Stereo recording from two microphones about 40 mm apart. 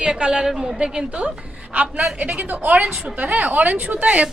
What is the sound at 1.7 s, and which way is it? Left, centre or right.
A woman's voice, right.